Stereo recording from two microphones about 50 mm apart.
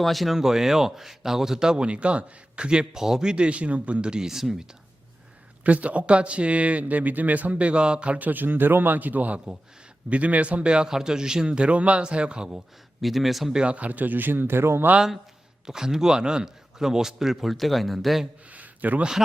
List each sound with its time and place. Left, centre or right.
0.0 s speech: centre
0.3 s a man's voice: centre
5.6 s a man's voice: right
13.0 s speech: centre
13.5 s speech: right
15.6 s a man's voice: centre
18.5 s a sound: right